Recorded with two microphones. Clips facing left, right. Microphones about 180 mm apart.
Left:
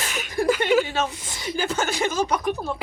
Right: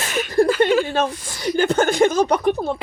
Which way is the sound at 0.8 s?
50° right (ahead or behind).